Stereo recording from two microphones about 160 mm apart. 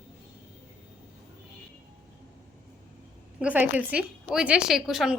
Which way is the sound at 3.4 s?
10° right (ahead or behind).